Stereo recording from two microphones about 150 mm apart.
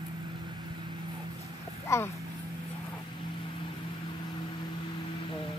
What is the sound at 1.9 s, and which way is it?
Speech, 20° left (ahead or behind).